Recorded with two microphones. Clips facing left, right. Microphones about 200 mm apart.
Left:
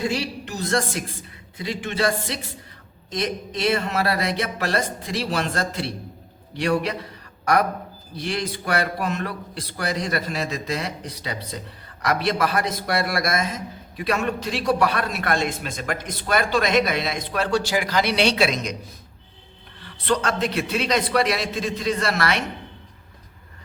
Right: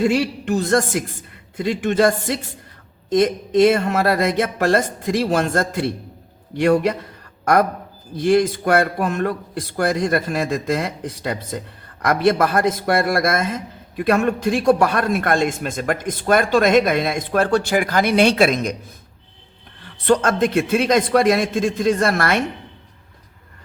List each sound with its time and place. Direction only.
0.2 s a man's voice: 50° right (ahead or behind)
8.1 s a man's voice: 50° right (ahead or behind)
19.8 s a man's voice: 45° right (ahead or behind)